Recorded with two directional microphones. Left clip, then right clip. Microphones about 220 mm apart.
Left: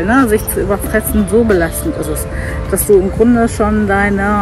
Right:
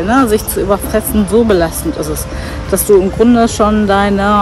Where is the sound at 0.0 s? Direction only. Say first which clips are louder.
Right 1 dB; 10° right (ahead or behind).